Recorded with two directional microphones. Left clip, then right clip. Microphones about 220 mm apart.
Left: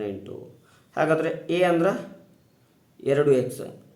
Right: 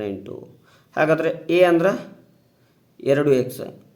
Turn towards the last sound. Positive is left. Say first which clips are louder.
# right 2 dB
turn(degrees=-30)  # may be behind; listen again after turning